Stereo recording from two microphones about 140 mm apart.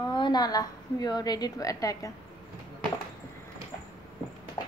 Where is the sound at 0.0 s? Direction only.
30° left (ahead or behind).